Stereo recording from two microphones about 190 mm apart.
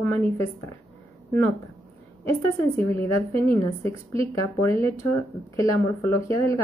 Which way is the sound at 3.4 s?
15° left (ahead or behind).